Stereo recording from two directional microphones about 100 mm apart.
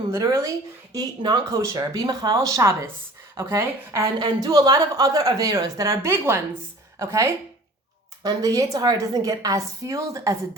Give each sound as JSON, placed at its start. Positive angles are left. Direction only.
{"t": 0.1, "sound": "a woman's voice", "side_deg": -35}
{"t": 4.2, "sound": "a woman's voice", "side_deg": -40}